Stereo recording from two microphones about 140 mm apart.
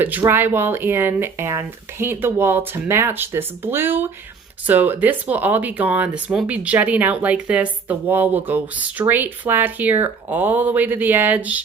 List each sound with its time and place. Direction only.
0.0 s speech: 15° right (ahead or behind)